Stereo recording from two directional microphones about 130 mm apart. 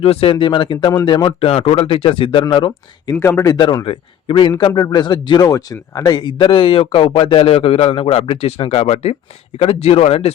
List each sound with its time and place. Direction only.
0.0 s a man's voice: 50° left (ahead or behind)
3.2 s a man's voice: 20° left (ahead or behind); by 10.3 s 50° left (ahead or behind)